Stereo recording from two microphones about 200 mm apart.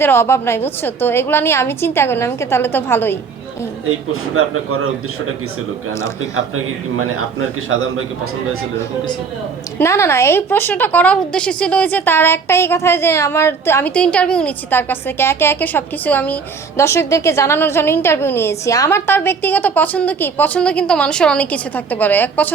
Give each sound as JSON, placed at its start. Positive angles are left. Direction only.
{"t": 0.0, "sound": "a woman's voice", "side_deg": 10}
{"t": 3.8, "sound": "a man's voice", "side_deg": -90}
{"t": 6.9, "sound": "a man's voice", "side_deg": -90}
{"t": 9.7, "sound": "a woman's voice", "side_deg": 15}